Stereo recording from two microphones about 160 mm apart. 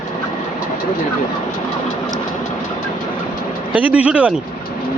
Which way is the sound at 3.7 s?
10° right (ahead or behind).